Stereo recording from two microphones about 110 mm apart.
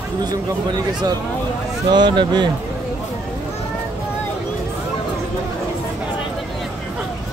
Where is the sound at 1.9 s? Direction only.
40° right (ahead or behind).